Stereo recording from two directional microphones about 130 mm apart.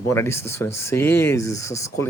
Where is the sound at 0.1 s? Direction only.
20° left (ahead or behind).